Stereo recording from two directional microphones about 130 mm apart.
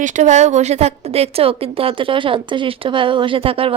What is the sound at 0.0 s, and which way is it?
A woman's voice, 60° right (ahead or behind).